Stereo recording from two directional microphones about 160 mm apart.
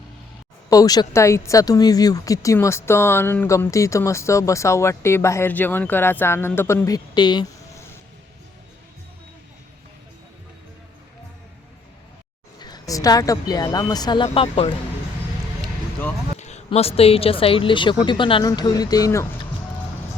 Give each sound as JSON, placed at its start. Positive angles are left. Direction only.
{"t": 0.7, "sound": "speech", "side_deg": 25}
{"t": 12.5, "sound": "speech", "side_deg": 25}
{"t": 16.4, "sound": "a sound", "side_deg": 45}
{"t": 16.6, "sound": "speech", "side_deg": 40}